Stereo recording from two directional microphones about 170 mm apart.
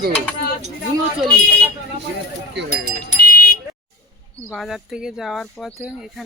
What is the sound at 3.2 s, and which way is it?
Vehicle, 60° left (ahead or behind).